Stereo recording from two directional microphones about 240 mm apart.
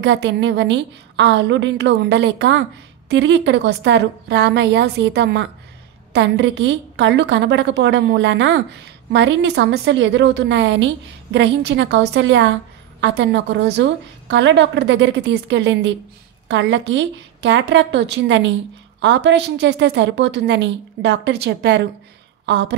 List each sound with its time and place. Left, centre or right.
0.0 s a woman's voice: right